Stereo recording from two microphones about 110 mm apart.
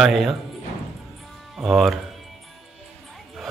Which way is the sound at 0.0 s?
Centre (ahead or behind).